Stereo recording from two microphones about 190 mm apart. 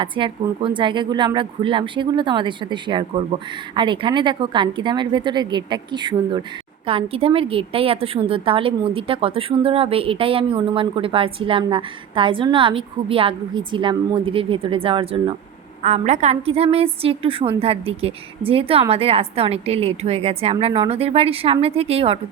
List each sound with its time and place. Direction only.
0.0 s a woman's voice: 25° right (ahead or behind)